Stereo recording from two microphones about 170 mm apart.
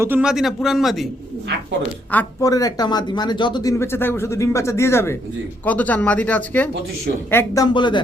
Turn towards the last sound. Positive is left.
turn(degrees=25)  # may be behind; listen again after turning